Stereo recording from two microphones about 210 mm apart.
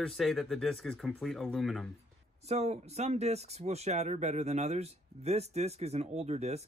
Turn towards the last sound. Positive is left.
turn(degrees=-30)  # may be behind; listen again after turning